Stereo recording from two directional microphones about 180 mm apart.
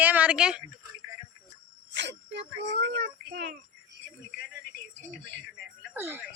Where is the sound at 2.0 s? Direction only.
75° right (ahead or behind).